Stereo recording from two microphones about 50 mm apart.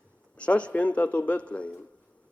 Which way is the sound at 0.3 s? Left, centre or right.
Left.